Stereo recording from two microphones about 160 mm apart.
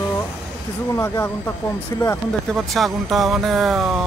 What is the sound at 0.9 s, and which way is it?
Speech, 15° left (ahead or behind).